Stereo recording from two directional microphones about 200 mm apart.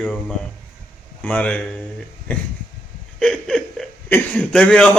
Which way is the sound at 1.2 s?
5° left (ahead or behind).